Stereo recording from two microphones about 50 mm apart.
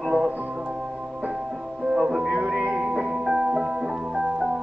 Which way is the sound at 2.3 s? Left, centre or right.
Right.